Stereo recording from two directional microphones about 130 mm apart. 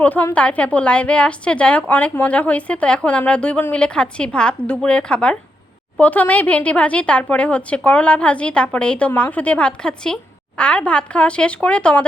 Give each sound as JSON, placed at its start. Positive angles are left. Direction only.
{"t": 0.0, "sound": "a woman's voice", "side_deg": 10}